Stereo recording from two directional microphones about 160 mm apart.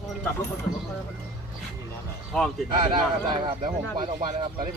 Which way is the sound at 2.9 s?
30° right (ahead or behind).